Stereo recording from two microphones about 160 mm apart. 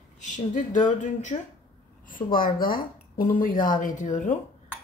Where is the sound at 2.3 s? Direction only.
65° left (ahead or behind).